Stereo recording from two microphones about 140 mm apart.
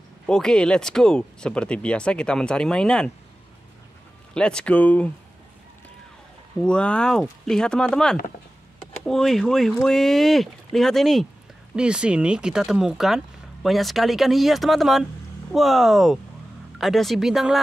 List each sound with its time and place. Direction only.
0.3 s speech: 5° left (ahead or behind)
4.3 s speech: 5° left (ahead or behind)
6.6 s speech: 5° left (ahead or behind)